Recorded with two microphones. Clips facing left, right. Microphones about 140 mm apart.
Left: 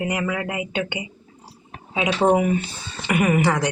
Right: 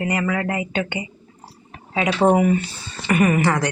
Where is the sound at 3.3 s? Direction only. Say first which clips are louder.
Even; 15° left (ahead or behind).